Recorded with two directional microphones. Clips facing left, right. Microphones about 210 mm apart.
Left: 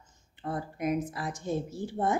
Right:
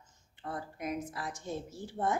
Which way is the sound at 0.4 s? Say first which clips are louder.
Left 6 dB; 15° left (ahead or behind).